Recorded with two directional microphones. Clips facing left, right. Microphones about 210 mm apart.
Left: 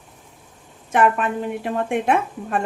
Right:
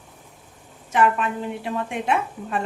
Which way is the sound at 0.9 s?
55° left (ahead or behind).